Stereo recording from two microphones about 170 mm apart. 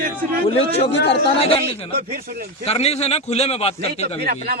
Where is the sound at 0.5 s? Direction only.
35° left (ahead or behind).